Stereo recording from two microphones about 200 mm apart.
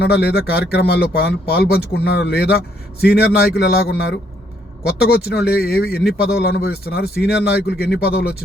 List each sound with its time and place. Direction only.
0.0 s speech: 50° left (ahead or behind)